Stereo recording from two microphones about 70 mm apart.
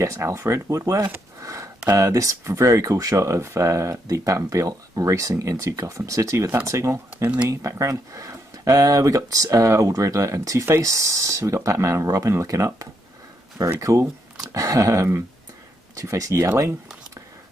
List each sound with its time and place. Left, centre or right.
0.0 s speech: right
1.4 s a sound: right
1.9 s speech: right